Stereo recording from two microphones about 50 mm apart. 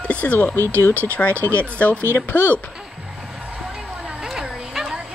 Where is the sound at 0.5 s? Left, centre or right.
Left.